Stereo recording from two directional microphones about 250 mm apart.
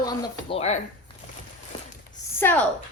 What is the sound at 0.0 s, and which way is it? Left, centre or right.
Speech, centre.